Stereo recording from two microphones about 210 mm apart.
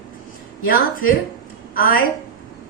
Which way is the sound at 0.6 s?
45° left (ahead or behind).